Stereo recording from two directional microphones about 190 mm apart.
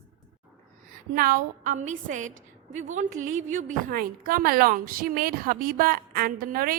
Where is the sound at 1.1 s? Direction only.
50° right (ahead or behind).